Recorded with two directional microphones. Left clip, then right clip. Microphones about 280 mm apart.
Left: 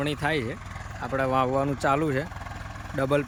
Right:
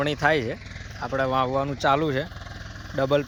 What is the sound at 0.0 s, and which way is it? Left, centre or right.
Speech, centre.